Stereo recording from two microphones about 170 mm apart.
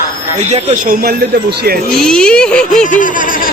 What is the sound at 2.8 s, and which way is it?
Speech, 50° left (ahead or behind).